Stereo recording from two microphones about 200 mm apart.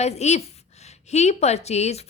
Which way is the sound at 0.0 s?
35° left (ahead or behind).